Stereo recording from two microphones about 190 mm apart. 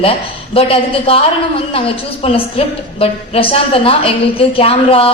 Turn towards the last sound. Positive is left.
turn(degrees=30)  # may be behind; listen again after turning